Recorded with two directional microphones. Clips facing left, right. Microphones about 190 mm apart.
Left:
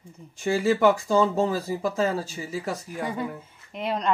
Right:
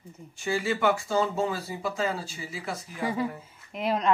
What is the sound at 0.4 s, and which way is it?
Speech, 40° left (ahead or behind).